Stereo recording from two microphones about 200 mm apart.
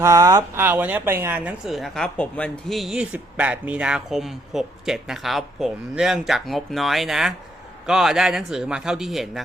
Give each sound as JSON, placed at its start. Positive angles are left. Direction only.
{"t": 0.0, "sound": "speech", "side_deg": -15}